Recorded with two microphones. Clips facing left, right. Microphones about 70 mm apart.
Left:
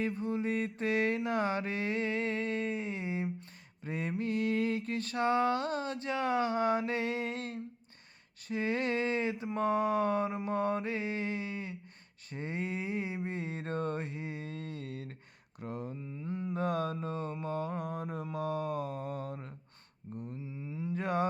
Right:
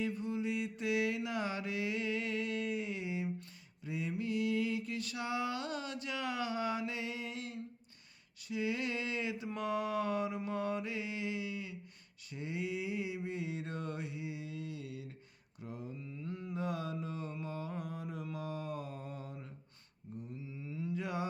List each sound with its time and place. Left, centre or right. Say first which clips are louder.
0.0 s mantra: left 3 dB; left
3.8 s a sound: left 3 dB; left
8.4 s mantra: left 4 dB; left
15.6 s speech: left 5 dB; left
16.0 s mantra: left 5 dB; left
16.6 s a sound: left 5 dB; left
17.4 s mantra: left 6 dB; left
20.3 s a sound: left 3 dB; left
20.9 s mantra: left 7 dB; left